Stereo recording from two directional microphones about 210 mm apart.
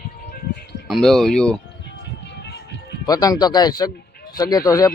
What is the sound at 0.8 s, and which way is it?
Speech, centre (ahead or behind).